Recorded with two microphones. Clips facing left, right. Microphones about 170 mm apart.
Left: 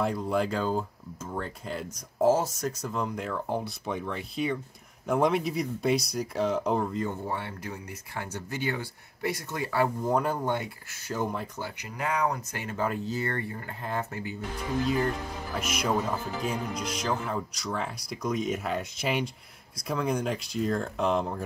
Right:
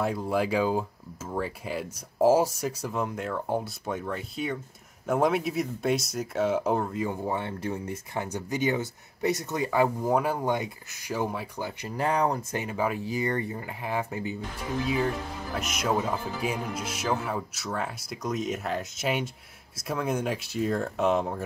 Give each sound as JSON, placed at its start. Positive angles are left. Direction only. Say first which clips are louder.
{"t": 0.0, "sound": "speech", "louder": "even", "side_deg": -5}
{"t": 7.3, "sound": "speech", "louder": "right 5 dB", "side_deg": -25}
{"t": 11.8, "sound": "speech", "louder": "right 3 dB", "side_deg": -35}
{"t": 12.5, "sound": "speech", "louder": "right 2 dB", "side_deg": -15}
{"t": 15.6, "sound": "speech", "louder": "even", "side_deg": 0}